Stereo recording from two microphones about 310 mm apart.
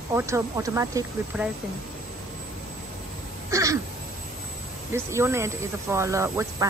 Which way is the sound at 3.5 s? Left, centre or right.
Centre.